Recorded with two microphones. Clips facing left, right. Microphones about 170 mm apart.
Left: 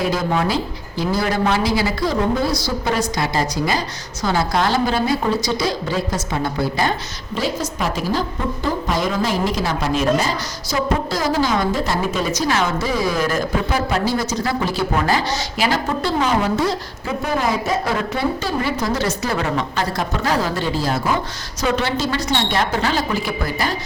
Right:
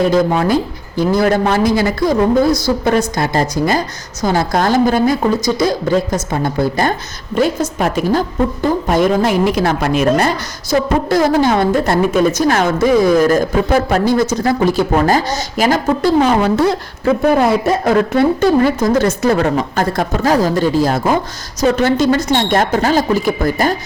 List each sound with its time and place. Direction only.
0.1 s a woman's voice: 50° right (ahead or behind)
16.4 s speech: 65° right (ahead or behind)
17.8 s a woman's voice: 50° right (ahead or behind)